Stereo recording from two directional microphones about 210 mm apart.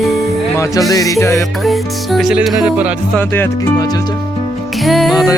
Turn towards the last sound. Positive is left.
turn(degrees=0)  # may be behind; listen again after turning